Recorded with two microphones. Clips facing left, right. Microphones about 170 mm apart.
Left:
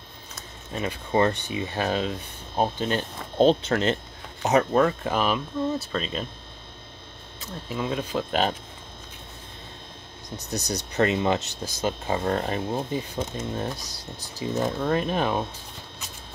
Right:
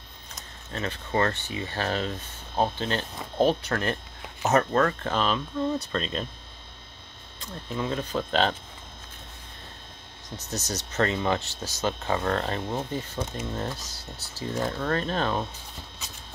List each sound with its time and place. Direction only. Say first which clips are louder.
0.7 s speech: left 3 dB; 10° left (ahead or behind)
7.3 s speech: left 1 dB; 5° left (ahead or behind)
10.5 s speech: left 3 dB; 15° left (ahead or behind)